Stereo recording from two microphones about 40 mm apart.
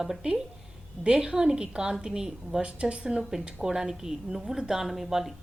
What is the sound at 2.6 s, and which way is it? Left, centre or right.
A woman's voice, right.